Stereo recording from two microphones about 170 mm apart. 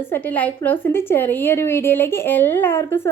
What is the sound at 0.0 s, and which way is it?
A woman's voice, 10° left (ahead or behind).